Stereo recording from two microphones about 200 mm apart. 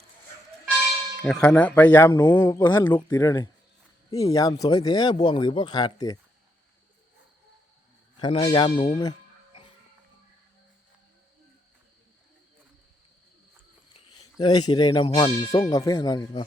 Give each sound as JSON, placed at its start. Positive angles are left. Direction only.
{"t": 1.2, "sound": "speech", "side_deg": 5}
{"t": 8.2, "sound": "speech", "side_deg": 25}
{"t": 14.3, "sound": "speech", "side_deg": 20}